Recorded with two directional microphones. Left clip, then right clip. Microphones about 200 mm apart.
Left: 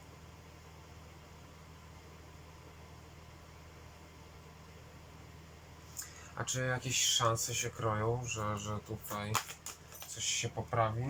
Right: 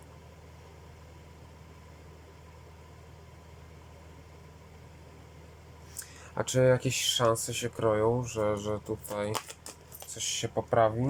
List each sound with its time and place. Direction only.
6.3 s speech: 45° right (ahead or behind)